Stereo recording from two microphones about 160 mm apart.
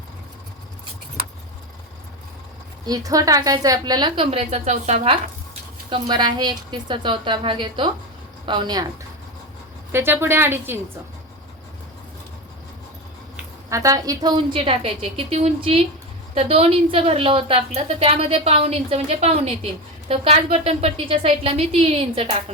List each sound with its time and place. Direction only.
2.8 s a woman's voice: 20° right (ahead or behind); by 5.1 s 45° right (ahead or behind)
5.9 s a woman's voice: 30° right (ahead or behind)
9.9 s a woman's voice: 15° right (ahead or behind)
13.7 s a woman's voice: 20° right (ahead or behind); by 22.4 s 35° right (ahead or behind)